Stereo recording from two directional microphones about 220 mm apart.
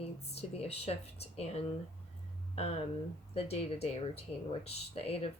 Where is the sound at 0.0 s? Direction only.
25° left (ahead or behind).